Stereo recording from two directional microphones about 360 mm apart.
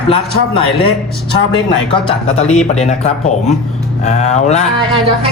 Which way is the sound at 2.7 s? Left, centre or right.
Centre.